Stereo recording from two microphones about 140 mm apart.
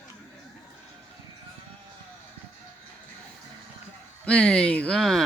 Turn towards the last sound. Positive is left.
turn(degrees=0)  # may be behind; listen again after turning